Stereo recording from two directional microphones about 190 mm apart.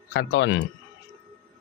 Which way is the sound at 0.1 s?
70° left (ahead or behind).